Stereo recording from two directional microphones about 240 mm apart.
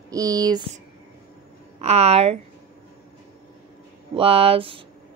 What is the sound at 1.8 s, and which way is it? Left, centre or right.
Speech, right.